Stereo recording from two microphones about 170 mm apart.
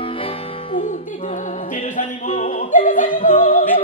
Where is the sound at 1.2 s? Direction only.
45° left (ahead or behind).